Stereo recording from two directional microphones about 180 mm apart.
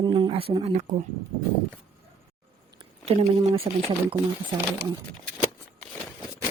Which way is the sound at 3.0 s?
35° right (ahead or behind).